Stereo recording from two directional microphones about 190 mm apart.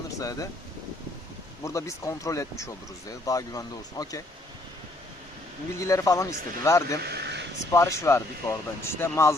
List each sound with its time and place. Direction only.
0.2 s speech: 20° left (ahead or behind)
1.6 s speech: 15° left (ahead or behind)
5.8 s speech: 15° left (ahead or behind)
7.0 s a sound: 60° right (ahead or behind)
7.7 s speech: 15° left (ahead or behind)